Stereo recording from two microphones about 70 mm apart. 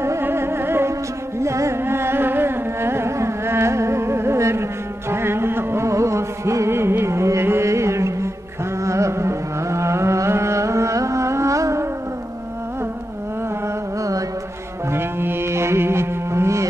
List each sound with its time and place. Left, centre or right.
0.0 s music: right
1.4 s carnatic music: right
5.1 s music: right
14.9 s music: right